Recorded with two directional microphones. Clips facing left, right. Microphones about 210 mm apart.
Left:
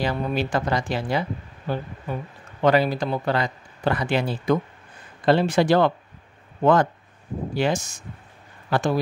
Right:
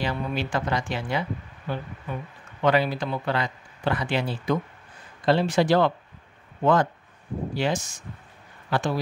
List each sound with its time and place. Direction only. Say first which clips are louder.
0.0 s speech: left 4 dB; 40° left (ahead or behind)
5.2 s speech: left 2 dB; 55° left (ahead or behind)